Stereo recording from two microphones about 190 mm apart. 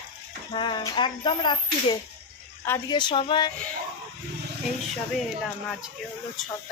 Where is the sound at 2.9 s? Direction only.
25° left (ahead or behind).